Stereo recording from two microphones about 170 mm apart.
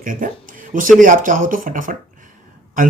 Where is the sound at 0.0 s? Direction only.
55° right (ahead or behind).